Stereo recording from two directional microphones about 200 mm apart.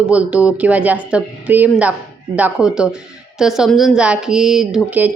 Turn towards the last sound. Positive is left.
turn(degrees=-5)  # may be behind; listen again after turning